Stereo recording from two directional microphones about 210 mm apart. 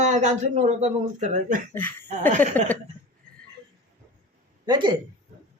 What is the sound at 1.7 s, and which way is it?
Speech, 10° left (ahead or behind).